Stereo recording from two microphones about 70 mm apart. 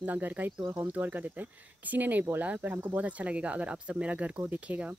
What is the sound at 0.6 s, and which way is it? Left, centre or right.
Speech, right.